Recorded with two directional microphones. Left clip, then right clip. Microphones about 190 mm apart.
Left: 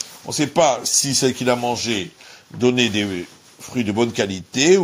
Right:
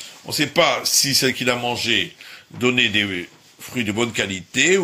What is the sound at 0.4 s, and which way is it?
Speech, 40° left (ahead or behind).